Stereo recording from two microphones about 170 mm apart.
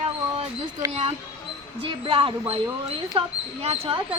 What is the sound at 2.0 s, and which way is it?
Speech, 30° right (ahead or behind).